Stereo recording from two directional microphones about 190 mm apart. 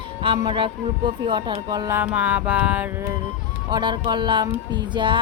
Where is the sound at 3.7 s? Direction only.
25° right (ahead or behind).